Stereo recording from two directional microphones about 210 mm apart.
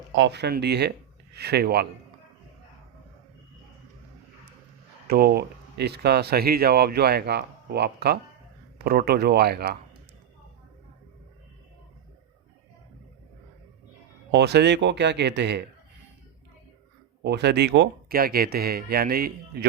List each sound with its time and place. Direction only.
0.2 s speech: 55° right (ahead or behind)
5.0 s speech: 45° right (ahead or behind)
14.3 s speech: 55° right (ahead or behind)
17.2 s speech: 55° right (ahead or behind)